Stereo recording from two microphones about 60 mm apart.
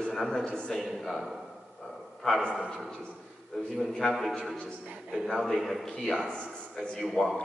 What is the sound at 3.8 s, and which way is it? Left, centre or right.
A man's voice, centre.